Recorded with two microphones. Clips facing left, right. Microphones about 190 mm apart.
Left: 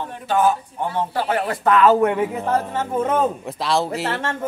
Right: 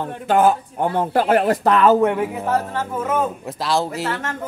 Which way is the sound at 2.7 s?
25° left (ahead or behind).